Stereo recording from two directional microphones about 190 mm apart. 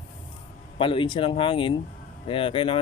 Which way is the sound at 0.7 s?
25° left (ahead or behind).